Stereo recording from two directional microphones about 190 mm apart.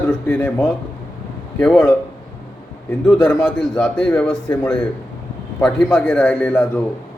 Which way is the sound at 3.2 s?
10° left (ahead or behind).